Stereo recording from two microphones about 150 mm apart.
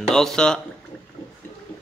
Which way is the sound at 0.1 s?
5° left (ahead or behind).